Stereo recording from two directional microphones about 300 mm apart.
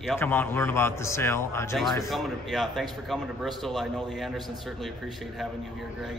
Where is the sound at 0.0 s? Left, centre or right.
Centre.